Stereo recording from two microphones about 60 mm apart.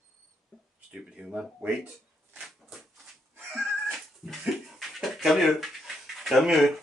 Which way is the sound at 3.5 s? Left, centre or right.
Centre.